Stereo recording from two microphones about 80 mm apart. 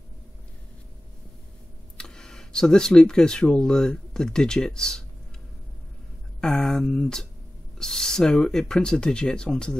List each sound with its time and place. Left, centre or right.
2.0 s speech: centre
6.4 s speech: centre